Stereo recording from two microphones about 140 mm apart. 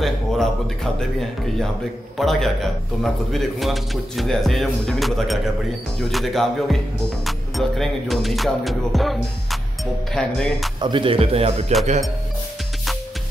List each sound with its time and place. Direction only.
0.0 s a man's voice: centre (ahead or behind)
10.8 s speech: 35° right (ahead or behind)